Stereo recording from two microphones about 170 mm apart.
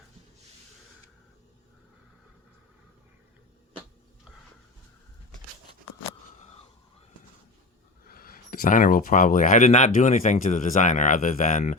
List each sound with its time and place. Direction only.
8.0 s speech: 60° left (ahead or behind)